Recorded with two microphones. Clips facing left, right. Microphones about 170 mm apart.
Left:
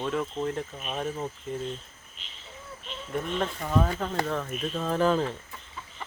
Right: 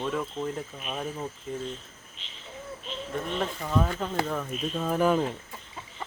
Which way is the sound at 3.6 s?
5° left (ahead or behind).